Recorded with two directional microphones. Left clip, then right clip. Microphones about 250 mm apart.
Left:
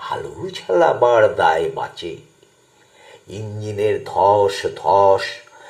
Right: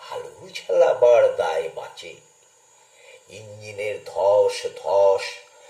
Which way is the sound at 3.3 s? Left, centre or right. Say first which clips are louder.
Left 9 dB; centre.